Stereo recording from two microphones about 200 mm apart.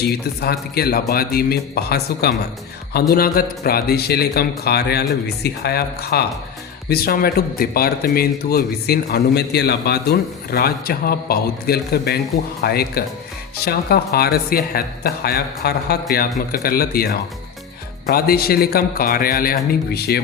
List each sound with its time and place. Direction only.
0.0 s speech: 55° left (ahead or behind)